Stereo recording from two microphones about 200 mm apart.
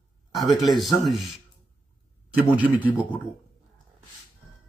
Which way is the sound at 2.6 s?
10° right (ahead or behind).